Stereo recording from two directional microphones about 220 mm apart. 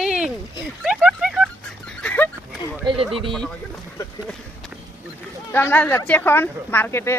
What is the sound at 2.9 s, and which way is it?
Speech, 20° right (ahead or behind).